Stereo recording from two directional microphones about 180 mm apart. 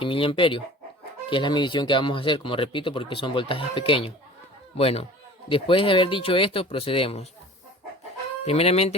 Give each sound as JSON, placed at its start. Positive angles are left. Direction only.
{"t": 0.0, "sound": "speech", "side_deg": 30}
{"t": 8.4, "sound": "speech", "side_deg": 35}